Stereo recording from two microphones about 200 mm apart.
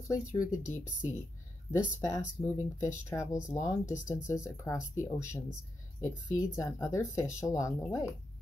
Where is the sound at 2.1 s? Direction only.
15° left (ahead or behind).